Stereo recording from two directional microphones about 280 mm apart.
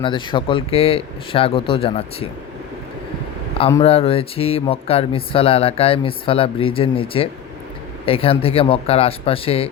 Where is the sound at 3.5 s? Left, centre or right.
Centre.